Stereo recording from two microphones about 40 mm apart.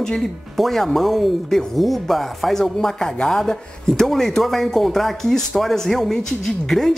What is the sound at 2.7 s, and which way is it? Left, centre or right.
Speech, centre.